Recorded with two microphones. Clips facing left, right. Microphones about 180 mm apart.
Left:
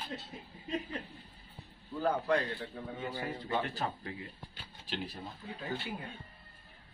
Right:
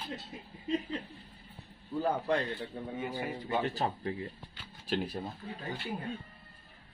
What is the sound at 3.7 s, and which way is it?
Speech, 30° right (ahead or behind).